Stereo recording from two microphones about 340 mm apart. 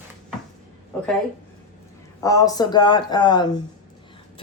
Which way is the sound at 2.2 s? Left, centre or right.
Centre.